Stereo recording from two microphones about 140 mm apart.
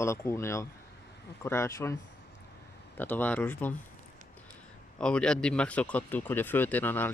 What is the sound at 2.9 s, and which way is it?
Speech, 15° left (ahead or behind).